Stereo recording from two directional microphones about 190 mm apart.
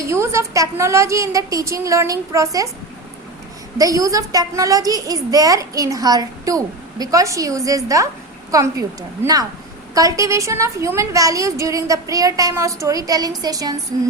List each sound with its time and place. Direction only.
0.1 s a woman's voice: 15° right (ahead or behind)
3.8 s a woman's voice: 20° right (ahead or behind)